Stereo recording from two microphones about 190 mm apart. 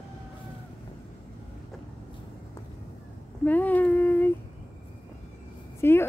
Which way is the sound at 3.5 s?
10° left (ahead or behind).